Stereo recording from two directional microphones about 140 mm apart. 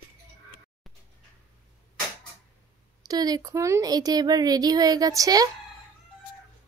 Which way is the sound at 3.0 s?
25° right (ahead or behind).